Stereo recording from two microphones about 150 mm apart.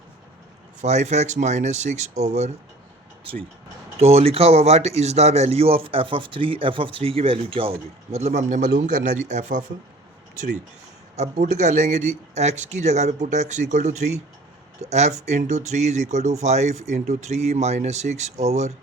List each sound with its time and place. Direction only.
0.8 s a man's voice: 50° right (ahead or behind)
3.9 s a man's voice: 45° right (ahead or behind)
11.4 s a man's voice: 50° right (ahead or behind)